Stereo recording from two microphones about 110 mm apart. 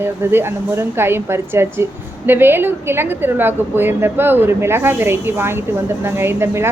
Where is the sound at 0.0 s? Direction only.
20° right (ahead or behind).